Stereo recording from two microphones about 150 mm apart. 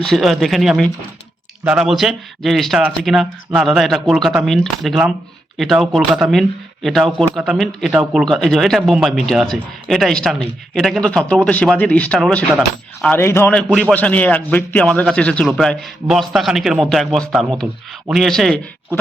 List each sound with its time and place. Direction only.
0.0 s a man's voice: centre (ahead or behind)
13.1 s a man's voice: 15° left (ahead or behind)